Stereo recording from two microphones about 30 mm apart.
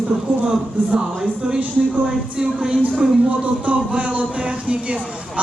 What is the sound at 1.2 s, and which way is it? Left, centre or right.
A man's voice, right.